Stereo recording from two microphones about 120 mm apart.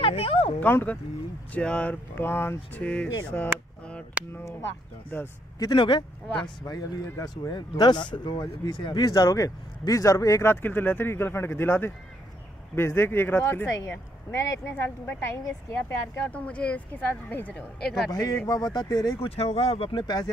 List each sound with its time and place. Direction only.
0.0 s a sound: 50° left (ahead or behind)
0.6 s speech: 15° left (ahead or behind)
3.3 s chop: 10° left (ahead or behind)
4.4 s speech: 20° left (ahead or behind)
5.6 s speech: 40° left (ahead or behind)
6.4 s speech: 30° left (ahead or behind); by 17.6 s 15° left (ahead or behind)
18.1 s speech: 30° left (ahead or behind)
19.2 s speech: 60° left (ahead or behind)
19.9 s speech: 35° left (ahead or behind)